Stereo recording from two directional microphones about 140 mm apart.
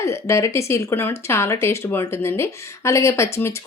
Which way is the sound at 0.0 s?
20° left (ahead or behind).